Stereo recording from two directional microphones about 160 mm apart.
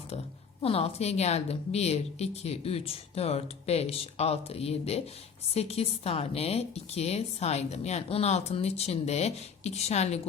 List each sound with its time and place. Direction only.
0.6 s a woman's voice: 40° left (ahead or behind)